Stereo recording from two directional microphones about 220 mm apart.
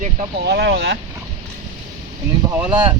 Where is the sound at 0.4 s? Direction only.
50° right (ahead or behind).